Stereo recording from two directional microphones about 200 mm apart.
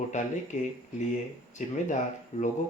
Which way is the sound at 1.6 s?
35° left (ahead or behind).